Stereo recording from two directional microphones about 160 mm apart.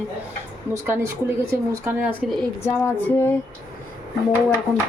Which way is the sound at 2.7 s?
15° left (ahead or behind).